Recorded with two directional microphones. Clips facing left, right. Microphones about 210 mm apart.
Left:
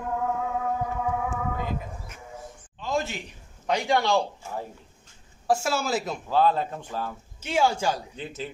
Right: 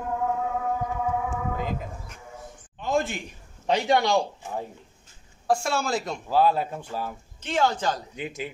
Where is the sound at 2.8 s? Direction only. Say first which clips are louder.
Right 3 dB; 55° right (ahead or behind).